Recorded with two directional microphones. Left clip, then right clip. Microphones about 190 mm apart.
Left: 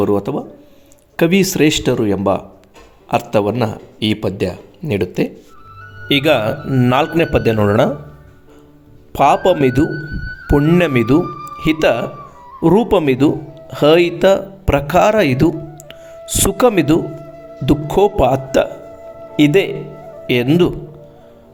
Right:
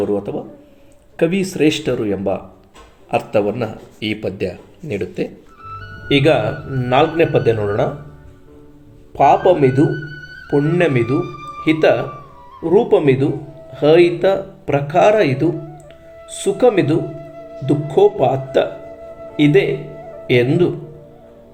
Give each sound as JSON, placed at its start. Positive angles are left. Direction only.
{"t": 0.0, "sound": "a man's voice", "side_deg": 50}
{"t": 6.1, "sound": "a man's voice", "side_deg": 60}
{"t": 9.1, "sound": "a man's voice", "side_deg": 60}